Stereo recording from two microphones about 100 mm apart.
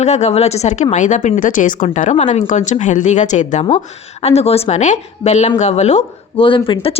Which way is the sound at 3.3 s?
90° left.